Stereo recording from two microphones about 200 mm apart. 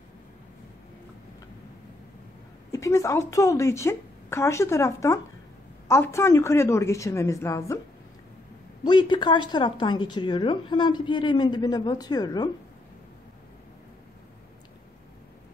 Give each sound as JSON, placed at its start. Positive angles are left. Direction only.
{"t": 2.7, "sound": "a woman's voice", "side_deg": 15}
{"t": 8.8, "sound": "speech", "side_deg": 20}